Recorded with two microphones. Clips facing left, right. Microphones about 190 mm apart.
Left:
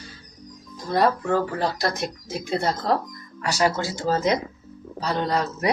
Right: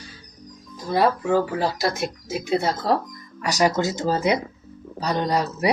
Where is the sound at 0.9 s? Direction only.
5° right (ahead or behind).